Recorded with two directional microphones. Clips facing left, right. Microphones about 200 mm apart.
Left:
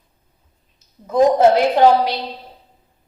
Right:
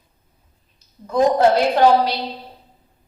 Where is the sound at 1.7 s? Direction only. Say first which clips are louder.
Left 1 dB; 20° left (ahead or behind).